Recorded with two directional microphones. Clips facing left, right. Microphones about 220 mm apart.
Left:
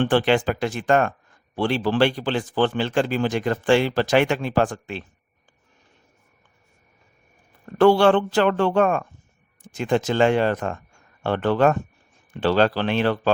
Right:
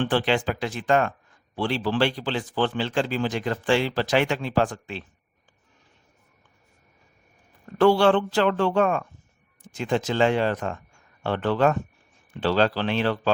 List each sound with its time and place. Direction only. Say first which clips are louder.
0.0 s speech: left 4 dB; 55° left (ahead or behind)
7.8 s speech: left 3 dB; 50° left (ahead or behind)